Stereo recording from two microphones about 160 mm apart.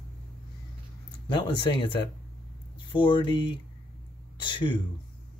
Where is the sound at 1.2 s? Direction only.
30° left (ahead or behind).